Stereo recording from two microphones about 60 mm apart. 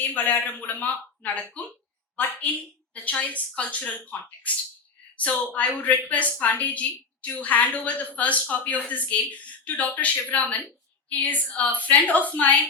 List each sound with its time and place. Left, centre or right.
0.0 s a woman's voice: left